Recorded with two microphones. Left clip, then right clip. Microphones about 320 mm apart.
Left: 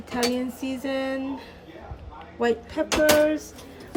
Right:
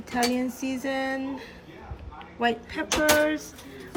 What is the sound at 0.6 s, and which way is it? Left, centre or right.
Music, left.